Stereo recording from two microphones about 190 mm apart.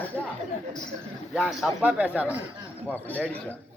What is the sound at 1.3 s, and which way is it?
A man's voice, centre (ahead or behind).